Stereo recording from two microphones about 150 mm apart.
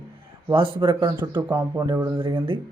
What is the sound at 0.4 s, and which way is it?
Speech, 35° right (ahead or behind).